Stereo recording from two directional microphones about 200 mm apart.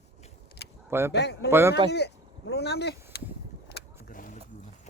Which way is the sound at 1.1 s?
55° left (ahead or behind).